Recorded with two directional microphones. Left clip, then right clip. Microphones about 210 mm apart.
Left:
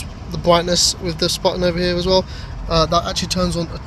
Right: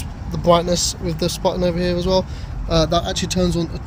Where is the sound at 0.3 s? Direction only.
Centre (ahead or behind).